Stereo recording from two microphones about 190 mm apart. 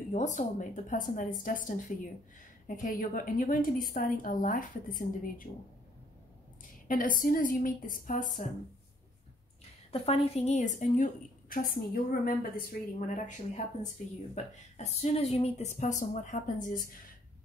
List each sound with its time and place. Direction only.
0.1 s a woman's voice: 40° left (ahead or behind)
6.9 s a woman's voice: 45° left (ahead or behind)
9.9 s a woman's voice: 30° left (ahead or behind)
14.3 s a woman's voice: 35° left (ahead or behind)